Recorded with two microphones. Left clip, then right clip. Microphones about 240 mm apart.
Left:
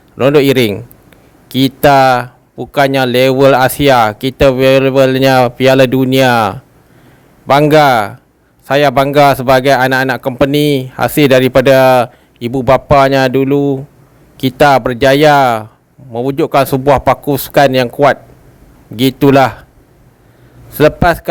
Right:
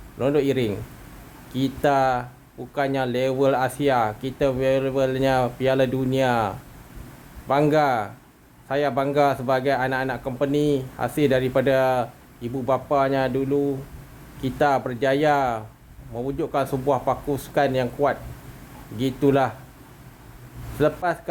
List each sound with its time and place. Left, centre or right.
0.2 s a man's voice: left
20.7 s a man's voice: left